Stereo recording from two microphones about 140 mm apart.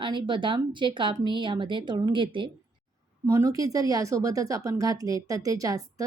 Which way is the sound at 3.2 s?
20° right (ahead or behind).